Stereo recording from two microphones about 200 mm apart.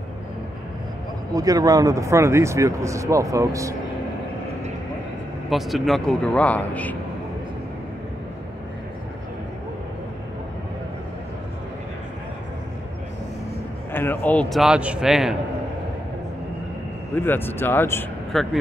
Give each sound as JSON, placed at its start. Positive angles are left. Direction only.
{"t": 1.3, "sound": "speech", "side_deg": -15}
{"t": 5.5, "sound": "a man's voice", "side_deg": 0}
{"t": 13.9, "sound": "a man's voice", "side_deg": 10}
{"t": 17.1, "sound": "speech", "side_deg": 10}